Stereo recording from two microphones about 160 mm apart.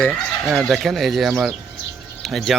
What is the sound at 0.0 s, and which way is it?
Speech, centre (ahead or behind).